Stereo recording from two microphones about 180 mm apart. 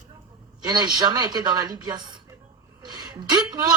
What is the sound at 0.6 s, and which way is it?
A woman's voice, 25° right (ahead or behind).